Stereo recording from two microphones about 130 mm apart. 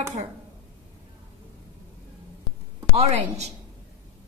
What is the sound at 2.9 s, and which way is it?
Speech, 50° right (ahead or behind).